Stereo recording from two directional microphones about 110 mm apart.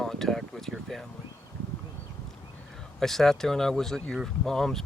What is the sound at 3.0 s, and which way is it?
Speech, 5° left (ahead or behind).